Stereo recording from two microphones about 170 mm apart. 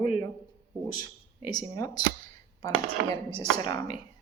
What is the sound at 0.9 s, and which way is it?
Speech, 25° left (ahead or behind).